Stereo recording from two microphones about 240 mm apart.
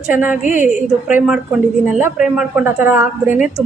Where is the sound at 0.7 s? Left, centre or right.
Centre.